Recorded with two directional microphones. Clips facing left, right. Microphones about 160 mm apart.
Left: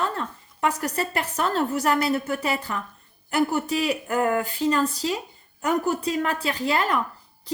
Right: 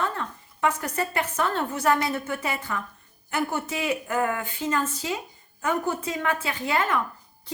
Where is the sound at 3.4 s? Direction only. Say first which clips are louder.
Left 5 dB; 35° left (ahead or behind).